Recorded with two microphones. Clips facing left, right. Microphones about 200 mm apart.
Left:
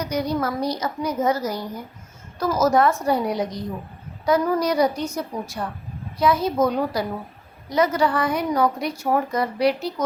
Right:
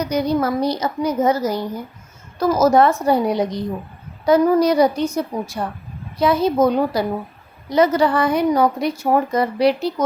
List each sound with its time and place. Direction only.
0.0 s a woman's voice: 25° right (ahead or behind)